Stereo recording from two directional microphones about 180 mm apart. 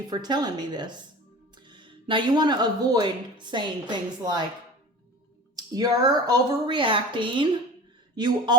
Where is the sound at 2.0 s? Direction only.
25° right (ahead or behind).